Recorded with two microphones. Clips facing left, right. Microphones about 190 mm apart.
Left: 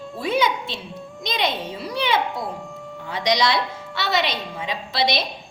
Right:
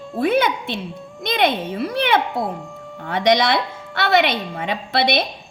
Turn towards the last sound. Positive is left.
turn(degrees=-55)  # may be behind; listen again after turning